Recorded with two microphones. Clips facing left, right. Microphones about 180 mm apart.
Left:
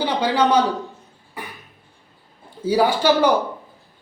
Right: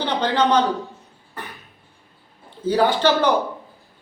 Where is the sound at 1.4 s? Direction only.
10° left (ahead or behind).